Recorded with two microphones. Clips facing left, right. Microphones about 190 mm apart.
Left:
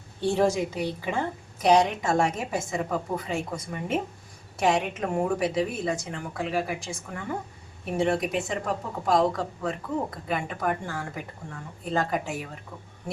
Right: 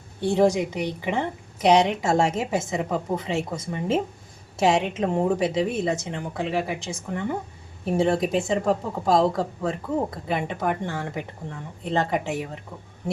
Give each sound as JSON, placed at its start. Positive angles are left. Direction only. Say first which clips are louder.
{"t": 0.2, "sound": "a woman's voice", "louder": "right 3 dB", "side_deg": -15}